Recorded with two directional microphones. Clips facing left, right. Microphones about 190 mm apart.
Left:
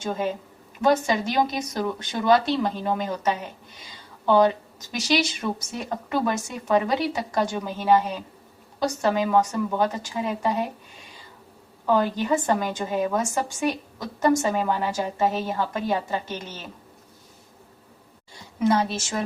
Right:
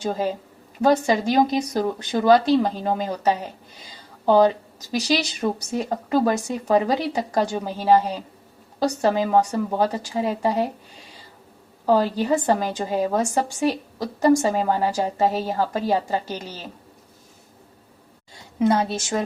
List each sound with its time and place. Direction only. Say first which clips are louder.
0.0 s a woman's voice: right 2 dB; 35° right (ahead or behind)
11.9 s a woman's voice: right 3 dB; 30° right (ahead or behind)